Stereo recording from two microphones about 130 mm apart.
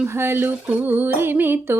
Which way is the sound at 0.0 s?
15° right (ahead or behind).